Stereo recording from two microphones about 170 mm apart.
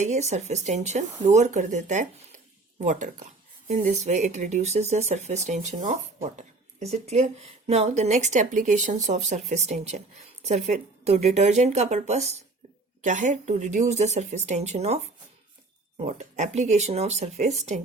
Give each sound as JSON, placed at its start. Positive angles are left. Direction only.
{"t": 0.0, "sound": "speech", "side_deg": -40}